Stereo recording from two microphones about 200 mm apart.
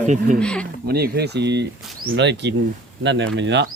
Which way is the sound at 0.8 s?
50° right (ahead or behind).